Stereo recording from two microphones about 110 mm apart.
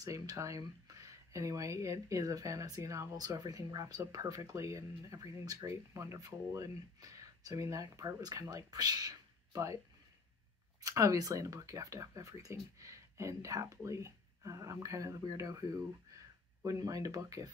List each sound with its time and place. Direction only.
0.0 s speech: 30° right (ahead or behind)
10.8 s speech: 30° right (ahead or behind)